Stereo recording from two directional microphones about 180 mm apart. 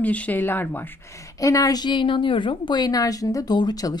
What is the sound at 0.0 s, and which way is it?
Speech, 10° left (ahead or behind).